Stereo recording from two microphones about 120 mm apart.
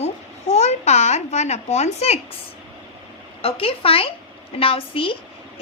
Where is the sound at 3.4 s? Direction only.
50° left (ahead or behind).